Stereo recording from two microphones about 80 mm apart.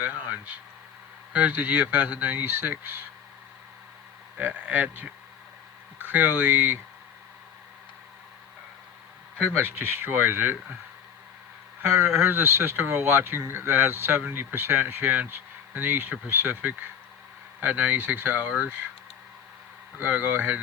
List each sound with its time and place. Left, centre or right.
0.0 s speech: right
4.4 s speech: right
9.6 s speech: right
11.8 s speech: right
20.0 s speech: right